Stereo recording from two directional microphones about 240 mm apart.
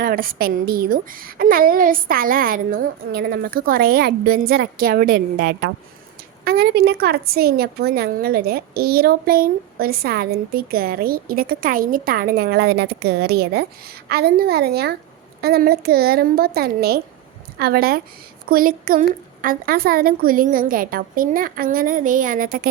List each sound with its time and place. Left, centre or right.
0.0 s a woman's voice: right